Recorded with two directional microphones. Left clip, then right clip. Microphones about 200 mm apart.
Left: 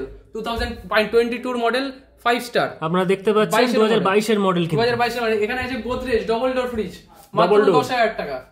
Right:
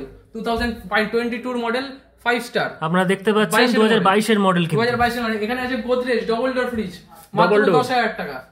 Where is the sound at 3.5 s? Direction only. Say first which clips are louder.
Right 1 dB; 40° left (ahead or behind).